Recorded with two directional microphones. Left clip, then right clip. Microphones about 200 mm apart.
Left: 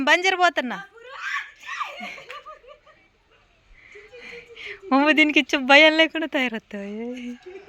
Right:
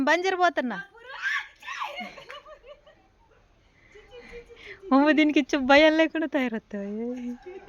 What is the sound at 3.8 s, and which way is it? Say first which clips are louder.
Speech: left 5 dB; 5° right (ahead or behind).